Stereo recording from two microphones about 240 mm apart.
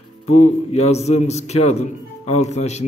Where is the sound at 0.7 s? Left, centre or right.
Left.